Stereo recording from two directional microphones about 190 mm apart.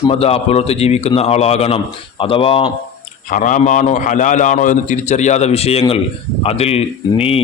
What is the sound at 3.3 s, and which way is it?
A man's voice, 45° left (ahead or behind).